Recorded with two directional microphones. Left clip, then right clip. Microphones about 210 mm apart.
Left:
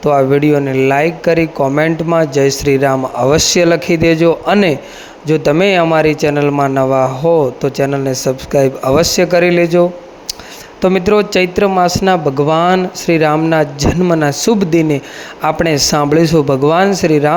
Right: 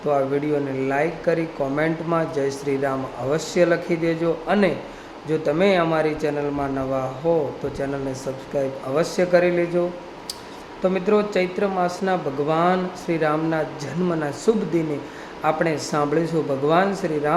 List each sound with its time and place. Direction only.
0.0 s a man's voice: 40° left (ahead or behind)
10.8 s a man's voice: 45° left (ahead or behind)